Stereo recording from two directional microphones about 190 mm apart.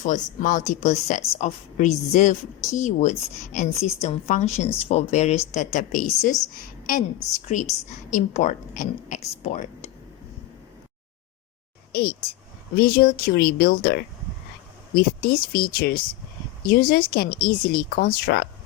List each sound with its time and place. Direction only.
0.0 s a woman's voice: 40° left (ahead or behind)
11.9 s a sound: 50° left (ahead or behind)
12.7 s speech: 55° left (ahead or behind)